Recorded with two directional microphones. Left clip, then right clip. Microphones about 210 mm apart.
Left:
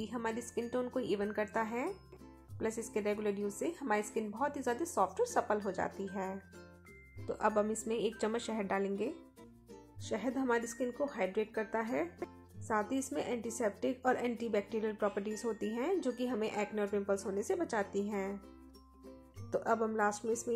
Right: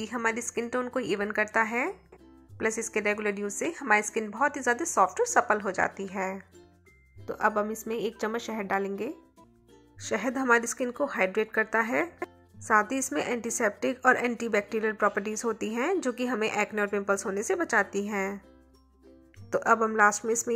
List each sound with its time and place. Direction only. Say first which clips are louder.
0.0 s a woman's voice: right 9 dB; 15° right (ahead or behind)
19.5 s a woman's voice: right 9 dB; 15° right (ahead or behind)